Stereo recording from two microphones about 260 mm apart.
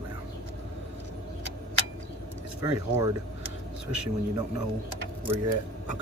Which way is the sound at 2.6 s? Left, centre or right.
Centre.